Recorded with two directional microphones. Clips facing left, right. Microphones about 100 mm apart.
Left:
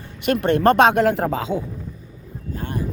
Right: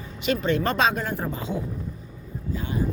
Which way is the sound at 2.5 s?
60° left (ahead or behind).